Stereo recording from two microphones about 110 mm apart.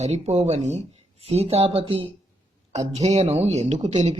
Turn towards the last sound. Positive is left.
turn(degrees=-90)